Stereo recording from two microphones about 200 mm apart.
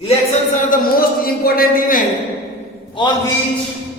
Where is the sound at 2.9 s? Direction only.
20° left (ahead or behind).